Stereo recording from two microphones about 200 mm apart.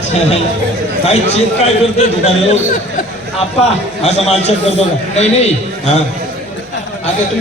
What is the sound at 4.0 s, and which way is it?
A man's voice, 35° left (ahead or behind).